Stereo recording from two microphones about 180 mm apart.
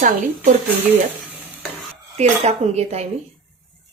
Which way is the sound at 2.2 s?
35° right (ahead or behind).